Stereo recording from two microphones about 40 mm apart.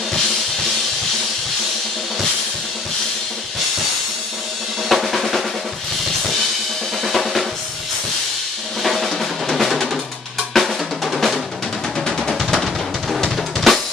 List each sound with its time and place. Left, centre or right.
4.8 s drum: centre
7.0 s drum kit: centre
8.8 s drum: centre